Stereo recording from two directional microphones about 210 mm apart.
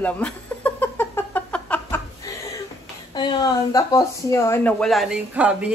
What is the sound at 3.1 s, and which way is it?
Speech, 20° left (ahead or behind).